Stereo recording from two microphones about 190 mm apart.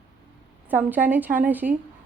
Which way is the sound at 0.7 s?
10° right (ahead or behind).